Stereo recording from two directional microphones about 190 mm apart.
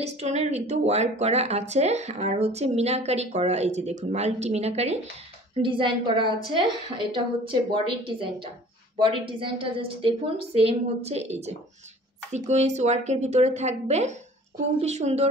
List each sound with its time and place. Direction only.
0.0 s a woman's voice: 35° right (ahead or behind)